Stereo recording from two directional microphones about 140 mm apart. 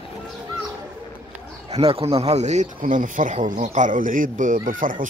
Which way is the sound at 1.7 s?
45° right (ahead or behind).